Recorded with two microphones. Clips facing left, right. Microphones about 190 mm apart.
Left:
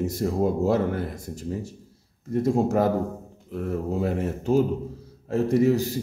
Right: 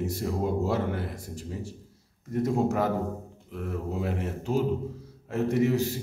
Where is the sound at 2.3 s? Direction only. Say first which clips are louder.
Left 3 dB; 35° left (ahead or behind).